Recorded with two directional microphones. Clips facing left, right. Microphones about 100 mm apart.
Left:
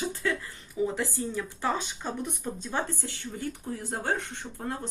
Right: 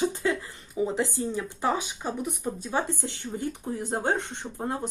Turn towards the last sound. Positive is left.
turn(degrees=-20)  # may be behind; listen again after turning